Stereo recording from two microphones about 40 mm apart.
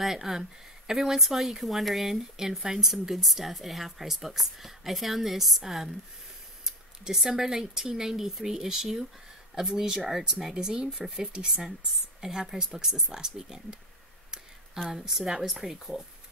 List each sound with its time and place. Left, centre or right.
0.0 s speech: centre
9.9 s speech: centre
10.5 s speech: right
14.9 s speech: centre